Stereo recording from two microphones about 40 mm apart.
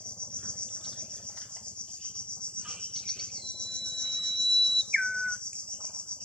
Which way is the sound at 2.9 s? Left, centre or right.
Centre.